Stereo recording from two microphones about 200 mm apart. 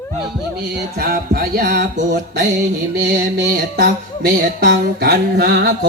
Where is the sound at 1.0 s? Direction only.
50° right (ahead or behind).